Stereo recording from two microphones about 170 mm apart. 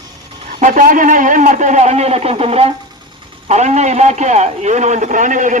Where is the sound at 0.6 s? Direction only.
50° right (ahead or behind).